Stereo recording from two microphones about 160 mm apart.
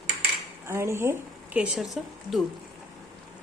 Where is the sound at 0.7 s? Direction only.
15° right (ahead or behind).